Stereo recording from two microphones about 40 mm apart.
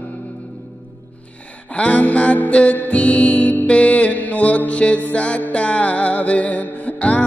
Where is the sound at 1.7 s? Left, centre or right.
Left.